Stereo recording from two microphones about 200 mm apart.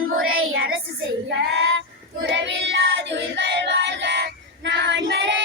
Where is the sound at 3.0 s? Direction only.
60° right (ahead or behind).